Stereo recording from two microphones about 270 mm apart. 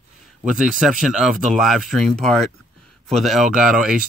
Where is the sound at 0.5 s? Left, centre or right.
Centre.